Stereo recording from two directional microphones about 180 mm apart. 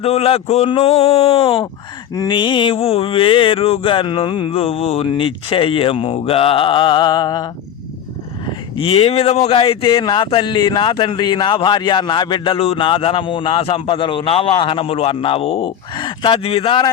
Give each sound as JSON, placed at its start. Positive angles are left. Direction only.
{"t": 0.0, "sound": "speech", "side_deg": 35}
{"t": 8.8, "sound": "speech", "side_deg": 35}